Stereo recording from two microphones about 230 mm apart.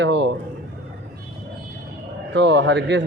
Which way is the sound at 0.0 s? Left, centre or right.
Right.